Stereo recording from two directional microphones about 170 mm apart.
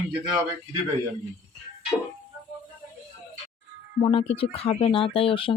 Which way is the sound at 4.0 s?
35° left (ahead or behind).